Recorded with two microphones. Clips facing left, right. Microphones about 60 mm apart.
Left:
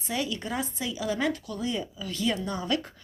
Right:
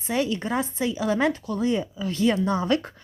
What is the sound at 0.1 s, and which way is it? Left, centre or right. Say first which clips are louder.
Speech: right 6 dB; right.